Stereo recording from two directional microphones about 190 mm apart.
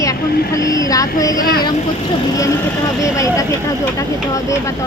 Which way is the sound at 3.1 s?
15° left (ahead or behind).